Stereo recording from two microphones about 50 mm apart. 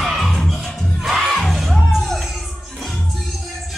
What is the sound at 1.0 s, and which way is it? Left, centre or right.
Music, centre.